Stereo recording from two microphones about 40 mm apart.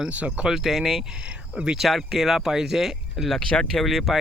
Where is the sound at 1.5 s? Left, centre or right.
Right.